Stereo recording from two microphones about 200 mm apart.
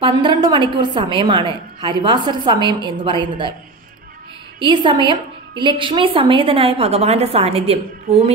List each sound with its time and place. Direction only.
0.0 s a woman's voice: 25° right (ahead or behind)
4.6 s a woman's voice: 25° right (ahead or behind)